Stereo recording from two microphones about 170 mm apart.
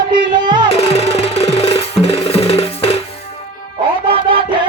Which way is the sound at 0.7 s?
35° left (ahead or behind).